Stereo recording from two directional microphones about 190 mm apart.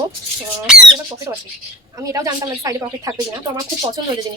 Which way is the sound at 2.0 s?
15° right (ahead or behind).